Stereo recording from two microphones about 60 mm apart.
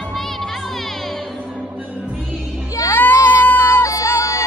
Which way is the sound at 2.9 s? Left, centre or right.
Left.